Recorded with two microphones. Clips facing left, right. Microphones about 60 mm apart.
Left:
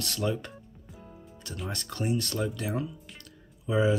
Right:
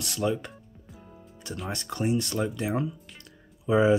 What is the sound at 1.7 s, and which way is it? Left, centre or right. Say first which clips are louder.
Speech: right 3 dB; centre.